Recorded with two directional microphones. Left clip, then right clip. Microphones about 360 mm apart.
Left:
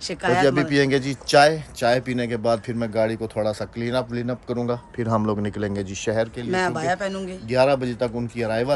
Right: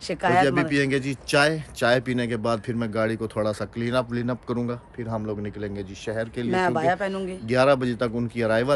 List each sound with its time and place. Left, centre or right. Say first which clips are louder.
0.1 s speech: even; centre
0.5 s speech: left 3 dB; centre
4.9 s speech: left 9 dB; left
6.5 s a man's voice: right 2 dB; centre
7.4 s speech: left 1 dB; centre